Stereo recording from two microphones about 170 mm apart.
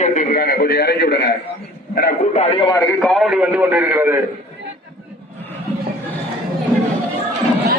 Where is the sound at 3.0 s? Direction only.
Centre (ahead or behind).